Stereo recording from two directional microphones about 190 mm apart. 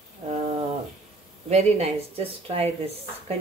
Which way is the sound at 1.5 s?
35° right (ahead or behind).